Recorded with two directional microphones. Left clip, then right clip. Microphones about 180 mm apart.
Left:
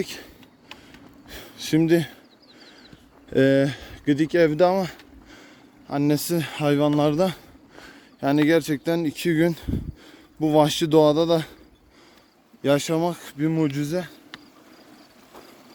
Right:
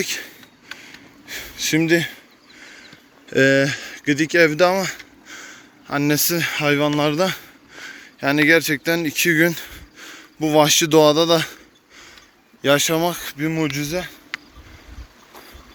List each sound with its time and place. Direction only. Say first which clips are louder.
0.0 s speech: right 7 dB; 20° left (ahead or behind)
2.6 s horse: right 8 dB; 20° left (ahead or behind)
3.2 s speech: right 4 dB; 15° left (ahead or behind); by 14.3 s 30° left (ahead or behind)